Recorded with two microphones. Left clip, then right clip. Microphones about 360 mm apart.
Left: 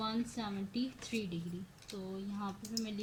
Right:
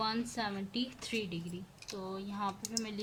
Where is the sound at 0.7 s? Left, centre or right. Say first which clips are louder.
Right 2 dB; right.